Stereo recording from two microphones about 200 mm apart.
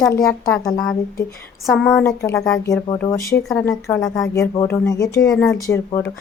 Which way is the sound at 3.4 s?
Centre (ahead or behind).